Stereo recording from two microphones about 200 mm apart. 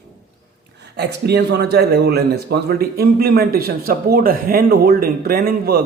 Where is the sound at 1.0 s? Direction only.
55° right (ahead or behind).